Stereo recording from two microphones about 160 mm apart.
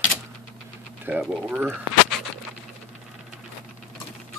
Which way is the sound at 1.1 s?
10° right (ahead or behind).